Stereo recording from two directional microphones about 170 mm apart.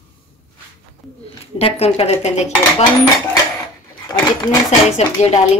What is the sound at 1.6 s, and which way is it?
Speech, 35° left (ahead or behind).